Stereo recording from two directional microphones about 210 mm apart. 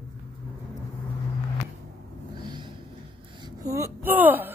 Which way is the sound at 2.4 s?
20° right (ahead or behind).